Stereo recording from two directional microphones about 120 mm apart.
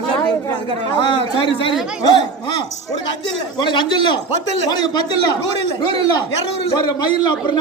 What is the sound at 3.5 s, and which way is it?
A man's voice, 40° left (ahead or behind).